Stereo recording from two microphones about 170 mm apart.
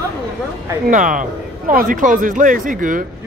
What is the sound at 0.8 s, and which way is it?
A man's voice, 50° right (ahead or behind).